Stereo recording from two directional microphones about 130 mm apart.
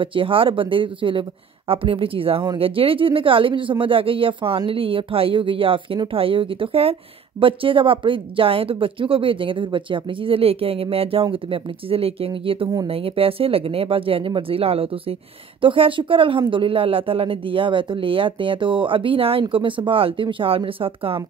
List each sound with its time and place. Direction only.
0.0 s speech: 40° right (ahead or behind)